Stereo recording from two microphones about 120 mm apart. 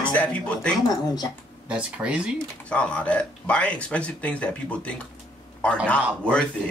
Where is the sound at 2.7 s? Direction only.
10° left (ahead or behind).